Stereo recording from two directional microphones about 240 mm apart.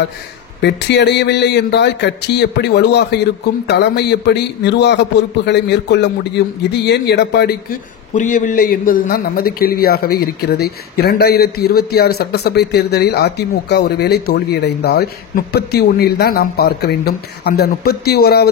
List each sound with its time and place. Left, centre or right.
0.6 s a man's voice: left
8.1 s a man's voice: left